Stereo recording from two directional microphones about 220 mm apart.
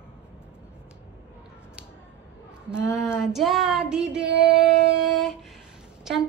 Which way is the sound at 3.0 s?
Centre (ahead or behind).